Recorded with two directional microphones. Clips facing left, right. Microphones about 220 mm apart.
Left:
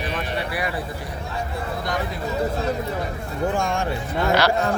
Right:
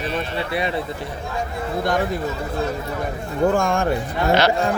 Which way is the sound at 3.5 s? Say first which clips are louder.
Right 4 dB; 50° right (ahead or behind).